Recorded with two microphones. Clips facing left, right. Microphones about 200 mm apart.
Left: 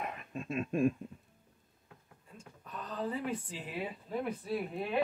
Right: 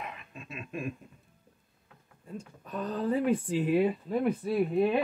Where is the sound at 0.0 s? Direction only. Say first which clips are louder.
Left 3 dB; 45° left (ahead or behind).